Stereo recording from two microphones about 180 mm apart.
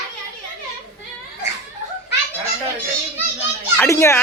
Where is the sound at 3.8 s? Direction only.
15° left (ahead or behind).